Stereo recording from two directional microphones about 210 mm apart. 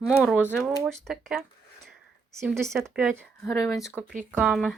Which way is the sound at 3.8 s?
5° right (ahead or behind).